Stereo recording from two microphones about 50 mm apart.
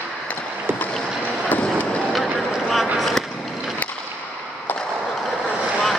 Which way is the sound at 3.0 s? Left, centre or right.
Centre.